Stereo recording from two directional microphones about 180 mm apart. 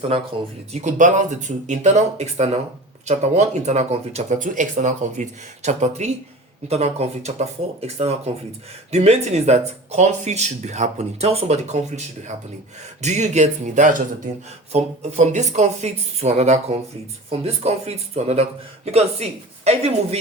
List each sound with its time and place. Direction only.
0.7 s speech: 40° right (ahead or behind)